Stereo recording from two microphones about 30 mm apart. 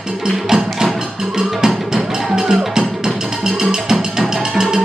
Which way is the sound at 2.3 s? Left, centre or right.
Centre.